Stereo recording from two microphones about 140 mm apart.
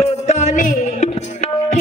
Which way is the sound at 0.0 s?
55° left (ahead or behind).